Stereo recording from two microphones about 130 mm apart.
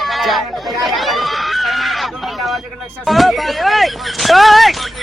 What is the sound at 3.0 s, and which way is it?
Speech, centre (ahead or behind).